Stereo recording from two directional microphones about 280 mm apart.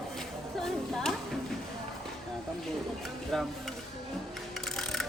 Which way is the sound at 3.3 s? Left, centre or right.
Centre.